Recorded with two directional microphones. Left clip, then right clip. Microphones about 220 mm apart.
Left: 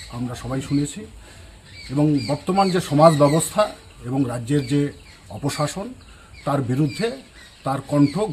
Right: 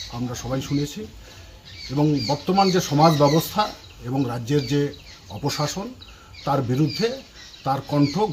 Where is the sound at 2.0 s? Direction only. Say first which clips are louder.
Left 1 dB; 10° left (ahead or behind).